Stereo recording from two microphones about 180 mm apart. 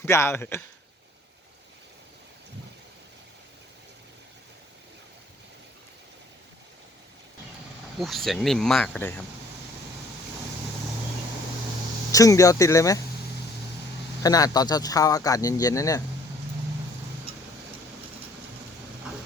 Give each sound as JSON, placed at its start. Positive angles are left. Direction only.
{"t": 0.0, "sound": "speech", "side_deg": 15}
{"t": 7.9, "sound": "speech", "side_deg": 0}
{"t": 12.1, "sound": "speech", "side_deg": 20}
{"t": 14.2, "sound": "a man's voice", "side_deg": 20}